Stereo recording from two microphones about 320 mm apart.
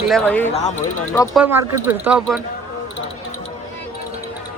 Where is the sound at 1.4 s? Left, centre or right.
Centre.